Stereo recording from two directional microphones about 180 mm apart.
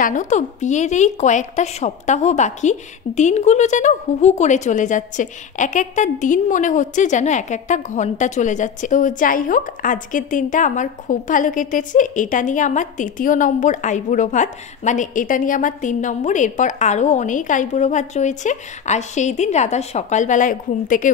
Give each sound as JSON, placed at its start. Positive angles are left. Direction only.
{"t": 0.0, "sound": "a woman's voice", "side_deg": 45}